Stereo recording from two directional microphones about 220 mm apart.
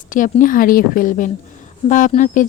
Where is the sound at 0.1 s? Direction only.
35° left (ahead or behind).